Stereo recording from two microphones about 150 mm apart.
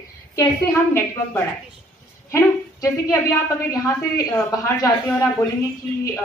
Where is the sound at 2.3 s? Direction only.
20° left (ahead or behind).